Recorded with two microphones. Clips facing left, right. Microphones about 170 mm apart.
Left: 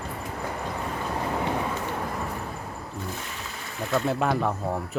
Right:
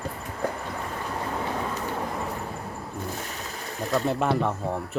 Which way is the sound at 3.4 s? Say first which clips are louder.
Right 2 dB; 40° right (ahead or behind).